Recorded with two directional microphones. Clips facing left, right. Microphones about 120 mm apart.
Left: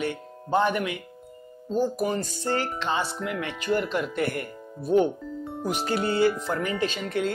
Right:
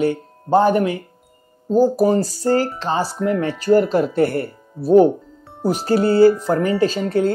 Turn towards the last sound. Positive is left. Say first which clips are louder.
# right 9 dB
turn(degrees=-35)  # may be behind; listen again after turning